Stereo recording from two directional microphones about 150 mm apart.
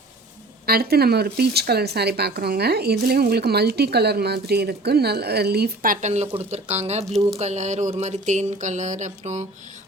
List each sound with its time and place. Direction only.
0.6 s speech: 90° right; by 7.0 s 45° right (ahead or behind)
7.0 s speech: centre (ahead or behind)
7.3 s a sound: 50° right (ahead or behind)